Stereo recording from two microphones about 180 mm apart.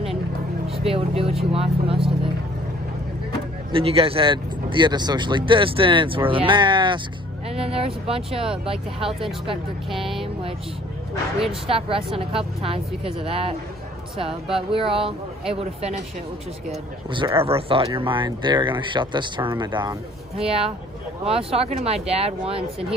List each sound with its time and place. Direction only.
0.8 s speech: 30° right (ahead or behind)
3.7 s speech: 30° right (ahead or behind)
11.6 s speech: 30° right (ahead or behind)
14.7 s speech: 30° right (ahead or behind)
17.1 s speech: 25° right (ahead or behind)